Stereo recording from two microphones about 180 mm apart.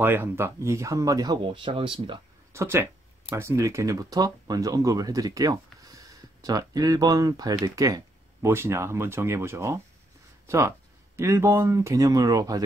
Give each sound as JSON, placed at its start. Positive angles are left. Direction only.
{"t": 0.0, "sound": "speech", "side_deg": -10}
{"t": 2.5, "sound": "speech", "side_deg": -15}